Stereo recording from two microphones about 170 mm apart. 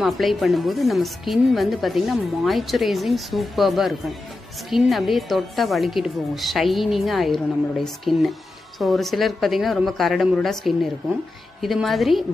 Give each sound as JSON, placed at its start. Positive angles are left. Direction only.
{"t": 0.0, "sound": "speech", "side_deg": 0}